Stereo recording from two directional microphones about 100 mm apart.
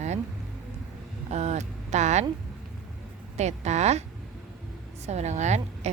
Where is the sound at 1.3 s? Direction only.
90° right.